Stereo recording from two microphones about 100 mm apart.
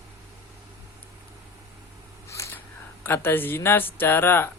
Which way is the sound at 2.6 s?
20° left (ahead or behind).